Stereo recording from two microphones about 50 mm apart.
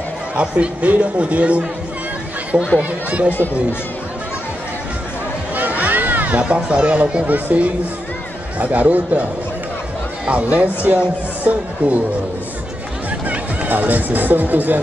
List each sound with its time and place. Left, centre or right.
0.4 s speech: right
2.8 s speech: right
5.6 s a sound: right
6.4 s speech: right
7.2 s speech: right
13.3 s speech: right